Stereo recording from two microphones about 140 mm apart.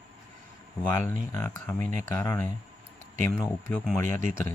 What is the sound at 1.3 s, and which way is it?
Speech, 20° left (ahead or behind).